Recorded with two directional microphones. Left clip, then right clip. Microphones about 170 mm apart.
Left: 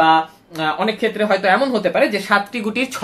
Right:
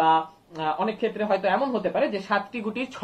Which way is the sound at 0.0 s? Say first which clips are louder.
Left 7 dB; 35° left (ahead or behind).